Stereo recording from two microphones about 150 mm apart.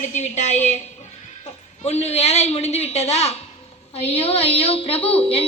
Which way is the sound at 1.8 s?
45° left (ahead or behind).